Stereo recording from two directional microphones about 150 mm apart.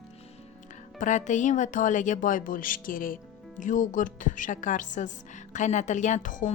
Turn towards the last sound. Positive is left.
turn(degrees=60)  # may be behind; listen again after turning